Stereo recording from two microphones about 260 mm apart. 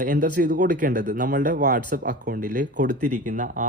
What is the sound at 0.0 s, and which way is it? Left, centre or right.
Speech, right.